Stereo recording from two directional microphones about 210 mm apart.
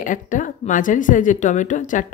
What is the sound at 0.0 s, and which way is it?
A woman's voice, 40° left (ahead or behind).